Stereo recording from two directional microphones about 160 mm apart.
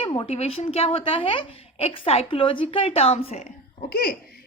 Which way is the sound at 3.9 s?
70° left (ahead or behind).